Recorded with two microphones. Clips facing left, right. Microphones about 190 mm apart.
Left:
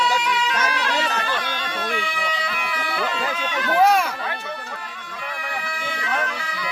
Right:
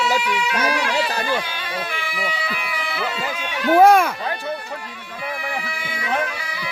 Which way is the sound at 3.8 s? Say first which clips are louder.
Right 4 dB; 55° right (ahead or behind).